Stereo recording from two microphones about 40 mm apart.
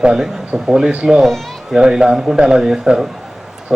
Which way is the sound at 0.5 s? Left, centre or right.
Centre.